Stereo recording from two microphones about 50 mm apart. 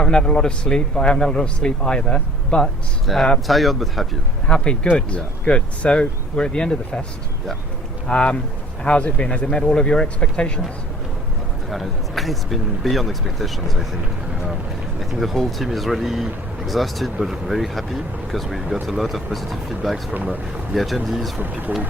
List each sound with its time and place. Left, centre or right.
0.0 s speech: centre
3.1 s speech: centre
4.4 s speech: centre
8.0 s speech: centre
11.7 s speech: centre
14.9 s speech: centre